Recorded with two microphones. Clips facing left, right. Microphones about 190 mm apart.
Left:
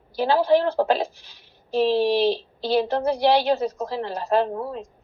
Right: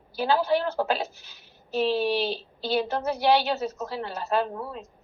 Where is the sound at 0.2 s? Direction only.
35° left (ahead or behind).